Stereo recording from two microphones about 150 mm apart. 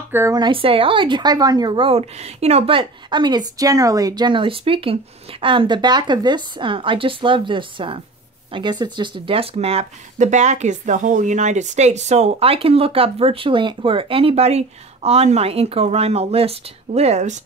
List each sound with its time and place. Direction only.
0.1 s speech: 15° right (ahead or behind)
0.4 s speech: 35° right (ahead or behind)